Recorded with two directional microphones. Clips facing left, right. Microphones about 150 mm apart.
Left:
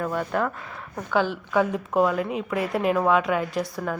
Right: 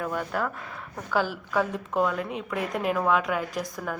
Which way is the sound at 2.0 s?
5° left (ahead or behind).